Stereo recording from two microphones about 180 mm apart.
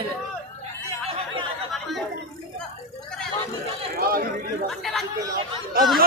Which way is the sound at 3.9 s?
55° right (ahead or behind).